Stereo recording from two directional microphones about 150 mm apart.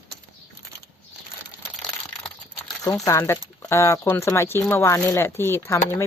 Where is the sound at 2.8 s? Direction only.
20° left (ahead or behind).